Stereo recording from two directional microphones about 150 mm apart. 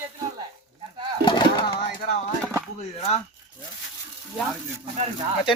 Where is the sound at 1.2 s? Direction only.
30° left (ahead or behind).